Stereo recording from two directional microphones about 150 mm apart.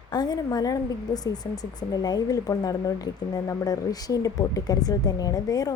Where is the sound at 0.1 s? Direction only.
25° left (ahead or behind).